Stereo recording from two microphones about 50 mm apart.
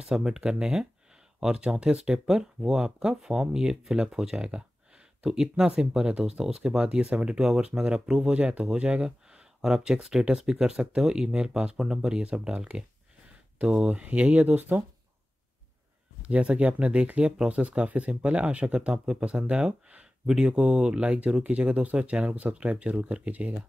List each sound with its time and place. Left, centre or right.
0.0 s speech: centre; by 14.8 s right
16.2 s speech: right
22.3 s speech: right